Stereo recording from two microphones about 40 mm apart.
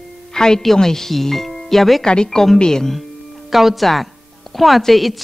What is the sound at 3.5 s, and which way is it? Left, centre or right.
Speech, centre.